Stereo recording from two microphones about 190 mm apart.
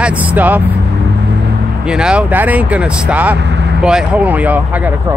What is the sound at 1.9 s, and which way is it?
Speech, 5° right (ahead or behind).